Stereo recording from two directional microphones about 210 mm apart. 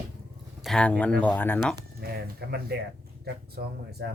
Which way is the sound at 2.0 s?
50° right (ahead or behind).